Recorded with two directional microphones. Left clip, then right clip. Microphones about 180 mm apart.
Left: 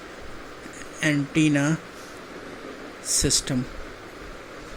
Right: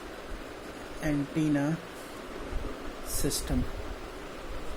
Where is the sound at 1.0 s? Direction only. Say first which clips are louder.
Left 8 dB; 40° left (ahead or behind).